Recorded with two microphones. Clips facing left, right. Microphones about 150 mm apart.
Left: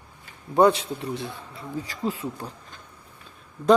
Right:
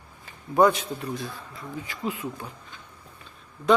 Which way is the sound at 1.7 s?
35° left (ahead or behind).